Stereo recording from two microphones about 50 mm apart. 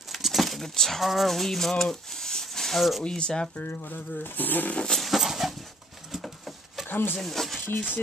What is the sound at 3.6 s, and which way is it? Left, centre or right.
Speech, left.